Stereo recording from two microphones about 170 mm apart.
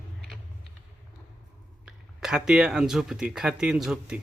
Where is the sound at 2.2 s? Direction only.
5° right (ahead or behind).